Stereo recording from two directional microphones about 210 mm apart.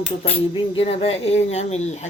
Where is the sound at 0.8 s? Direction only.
30° left (ahead or behind).